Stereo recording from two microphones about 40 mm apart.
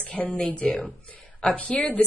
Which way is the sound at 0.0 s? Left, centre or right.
Left.